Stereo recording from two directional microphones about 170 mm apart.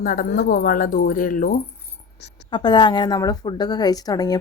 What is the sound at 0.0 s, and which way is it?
Speech, 55° left (ahead or behind).